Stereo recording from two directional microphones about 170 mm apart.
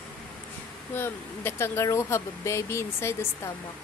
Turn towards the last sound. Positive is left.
turn(degrees=15)  # may be behind; listen again after turning